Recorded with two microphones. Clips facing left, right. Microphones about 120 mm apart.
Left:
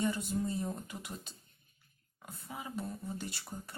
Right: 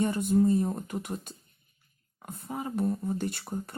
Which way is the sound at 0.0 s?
55° right (ahead or behind).